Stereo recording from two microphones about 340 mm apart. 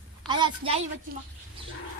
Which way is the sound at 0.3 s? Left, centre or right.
Centre.